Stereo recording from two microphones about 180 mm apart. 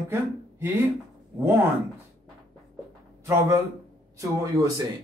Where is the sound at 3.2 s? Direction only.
15° right (ahead or behind).